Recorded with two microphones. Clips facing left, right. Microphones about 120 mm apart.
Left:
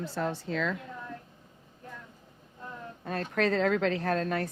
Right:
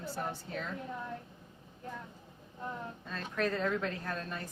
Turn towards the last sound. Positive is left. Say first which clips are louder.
# left 10 dB
turn(degrees=75)  # may be behind; listen again after turning